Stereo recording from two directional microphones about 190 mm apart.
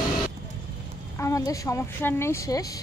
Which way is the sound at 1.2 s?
15° left (ahead or behind).